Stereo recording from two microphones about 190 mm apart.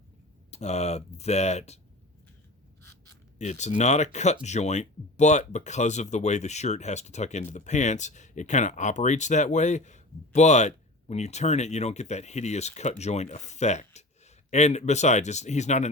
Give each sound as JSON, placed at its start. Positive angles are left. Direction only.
{"t": 0.5, "sound": "speech", "side_deg": 35}
{"t": 3.3, "sound": "speech", "side_deg": 40}